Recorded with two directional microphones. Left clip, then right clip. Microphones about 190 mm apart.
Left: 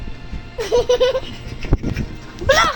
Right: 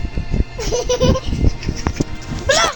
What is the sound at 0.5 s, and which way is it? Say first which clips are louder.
Baby laughter: left 4 dB; 30° left (ahead or behind).